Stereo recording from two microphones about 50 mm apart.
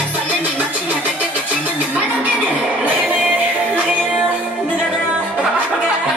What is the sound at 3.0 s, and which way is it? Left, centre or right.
Music, right.